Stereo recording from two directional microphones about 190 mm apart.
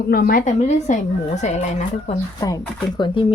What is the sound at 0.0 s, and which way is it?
A woman's voice, 50° left (ahead or behind).